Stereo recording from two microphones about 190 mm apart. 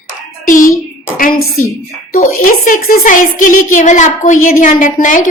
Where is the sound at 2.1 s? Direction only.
45° left (ahead or behind).